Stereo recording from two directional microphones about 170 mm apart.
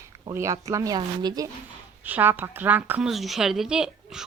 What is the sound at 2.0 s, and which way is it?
A woman's voice, 10° right (ahead or behind).